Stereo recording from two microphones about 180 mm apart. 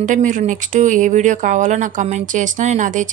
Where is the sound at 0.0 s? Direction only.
45° right (ahead or behind).